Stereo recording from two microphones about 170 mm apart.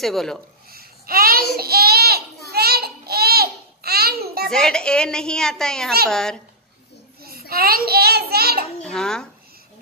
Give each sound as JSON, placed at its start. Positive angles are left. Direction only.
{"t": 0.0, "sound": "a woman's voice", "side_deg": 0}
{"t": 0.7, "sound": "babbling", "side_deg": -60}
{"t": 4.5, "sound": "a woman's voice", "side_deg": 5}
{"t": 7.2, "sound": "a child's voice", "side_deg": -60}
{"t": 8.8, "sound": "a woman's voice", "side_deg": 5}